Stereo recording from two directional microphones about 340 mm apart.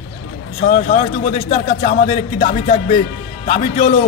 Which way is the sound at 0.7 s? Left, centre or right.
Centre.